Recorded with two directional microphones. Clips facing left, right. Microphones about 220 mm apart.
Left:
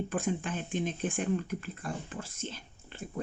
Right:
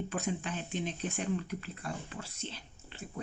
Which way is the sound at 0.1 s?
50° left (ahead or behind).